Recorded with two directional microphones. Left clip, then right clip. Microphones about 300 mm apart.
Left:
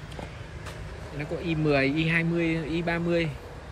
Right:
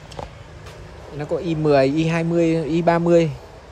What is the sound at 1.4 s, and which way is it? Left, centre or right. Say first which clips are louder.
Speech: right 8 dB; centre.